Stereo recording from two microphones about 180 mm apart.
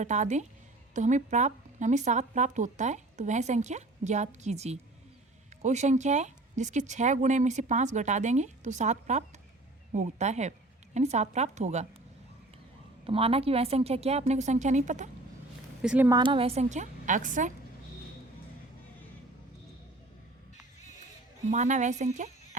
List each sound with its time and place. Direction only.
0.0 s speech: 40° right (ahead or behind)
13.1 s speech: 30° right (ahead or behind)
15.8 s speech: 5° right (ahead or behind)
16.0 s speech: 25° right (ahead or behind); by 17.5 s 45° right (ahead or behind)
21.5 s speech: 40° right (ahead or behind)